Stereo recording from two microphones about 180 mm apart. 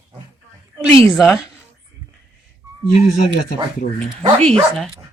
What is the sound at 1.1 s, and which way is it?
Speech, 5° right (ahead or behind).